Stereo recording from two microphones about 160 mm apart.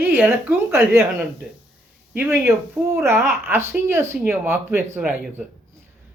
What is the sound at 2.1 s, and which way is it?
Speech, 15° right (ahead or behind).